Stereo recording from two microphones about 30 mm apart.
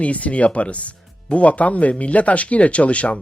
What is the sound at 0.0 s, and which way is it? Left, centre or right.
Speech, left.